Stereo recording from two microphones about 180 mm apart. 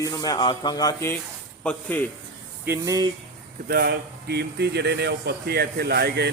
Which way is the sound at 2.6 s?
15° right (ahead or behind).